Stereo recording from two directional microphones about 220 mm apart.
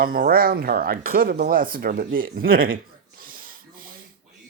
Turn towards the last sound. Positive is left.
turn(degrees=-40)  # may be behind; listen again after turning